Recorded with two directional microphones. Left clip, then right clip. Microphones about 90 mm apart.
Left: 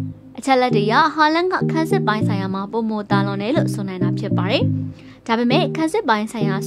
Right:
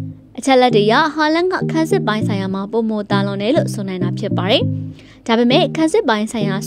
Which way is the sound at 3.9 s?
40° right (ahead or behind).